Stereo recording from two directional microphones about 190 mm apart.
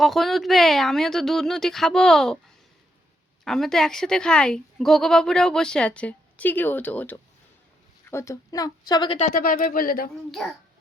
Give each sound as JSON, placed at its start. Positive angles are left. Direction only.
{"t": 0.0, "sound": "speech", "side_deg": 0}
{"t": 3.4, "sound": "speech", "side_deg": 0}
{"t": 9.1, "sound": "speech", "side_deg": 40}
{"t": 10.4, "sound": "speech", "side_deg": 0}